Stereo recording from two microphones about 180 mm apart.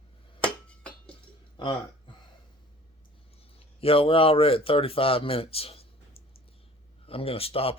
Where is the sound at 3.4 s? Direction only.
30° left (ahead or behind).